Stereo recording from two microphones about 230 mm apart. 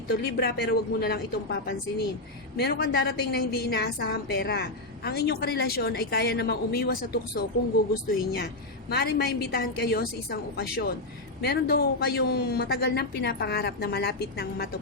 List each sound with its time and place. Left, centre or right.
0.1 s a woman's voice: left
8.9 s a woman's voice: left